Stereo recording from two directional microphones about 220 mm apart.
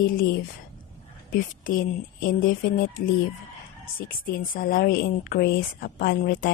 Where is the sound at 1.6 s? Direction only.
40° left (ahead or behind).